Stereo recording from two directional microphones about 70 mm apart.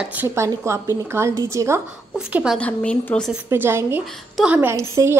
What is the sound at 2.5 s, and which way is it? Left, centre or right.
Speech, centre.